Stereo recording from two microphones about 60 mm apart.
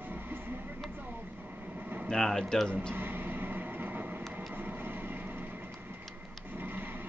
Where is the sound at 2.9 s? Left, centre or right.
Right.